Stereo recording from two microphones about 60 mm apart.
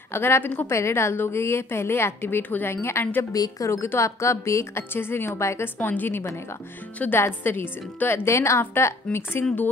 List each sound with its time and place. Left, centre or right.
0.1 s a woman's voice: left
3.3 s a woman's voice: left
4.9 s a woman's voice: left
5.8 s a woman's voice: left
8.3 s a woman's voice: left